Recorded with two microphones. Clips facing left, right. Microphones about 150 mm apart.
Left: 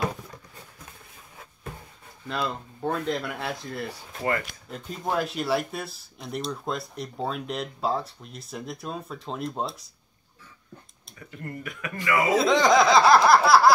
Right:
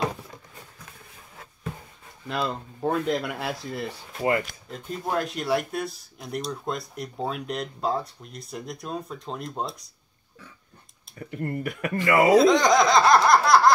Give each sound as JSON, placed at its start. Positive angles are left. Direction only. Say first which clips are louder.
{"t": 2.2, "sound": "speech", "louder": "right 1 dB", "side_deg": -5}
{"t": 11.2, "sound": "speech", "louder": "right 7 dB", "side_deg": -50}
{"t": 12.3, "sound": "speech", "louder": "right 2 dB", "side_deg": 0}